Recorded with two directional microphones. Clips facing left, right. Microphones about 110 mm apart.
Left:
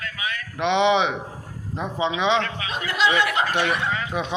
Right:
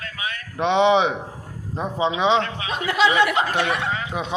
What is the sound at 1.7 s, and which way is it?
A man's voice, 35° right (ahead or behind).